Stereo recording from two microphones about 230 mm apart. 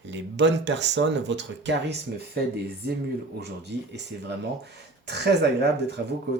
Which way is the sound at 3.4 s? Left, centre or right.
Right.